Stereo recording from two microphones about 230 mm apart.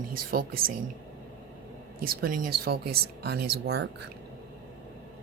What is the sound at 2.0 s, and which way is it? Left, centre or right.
Speech, right.